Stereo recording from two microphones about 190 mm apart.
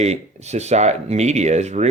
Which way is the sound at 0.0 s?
35° right (ahead or behind).